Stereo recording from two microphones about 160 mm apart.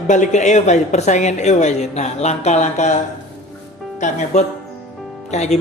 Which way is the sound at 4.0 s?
45° left (ahead or behind).